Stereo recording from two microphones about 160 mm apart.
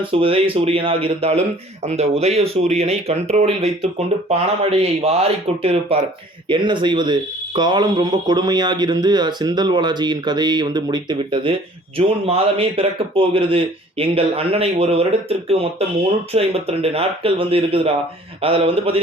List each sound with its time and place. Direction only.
0.0 s speech: 35° right (ahead or behind)